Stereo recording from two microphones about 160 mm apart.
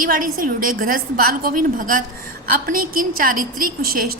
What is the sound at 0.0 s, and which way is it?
A woman's voice, 60° right (ahead or behind).